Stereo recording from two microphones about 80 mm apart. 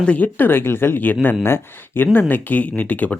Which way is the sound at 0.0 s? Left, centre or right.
Centre.